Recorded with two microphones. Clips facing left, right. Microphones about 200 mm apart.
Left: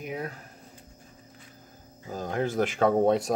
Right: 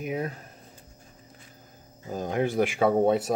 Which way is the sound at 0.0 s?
20° right (ahead or behind).